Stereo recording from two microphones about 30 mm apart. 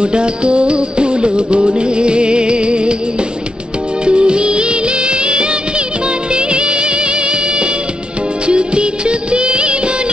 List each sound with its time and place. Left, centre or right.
0.0 s music: right
4.0 s music of bollywood: right
6.3 s music: right
8.5 s music of bollywood: right